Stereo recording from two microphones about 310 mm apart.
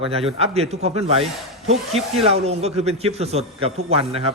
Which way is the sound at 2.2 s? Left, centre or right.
Centre.